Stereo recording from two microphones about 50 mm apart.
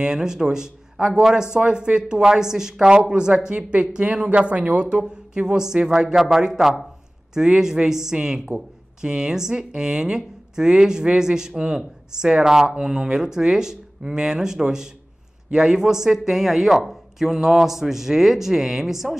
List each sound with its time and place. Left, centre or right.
0.0 s speech: centre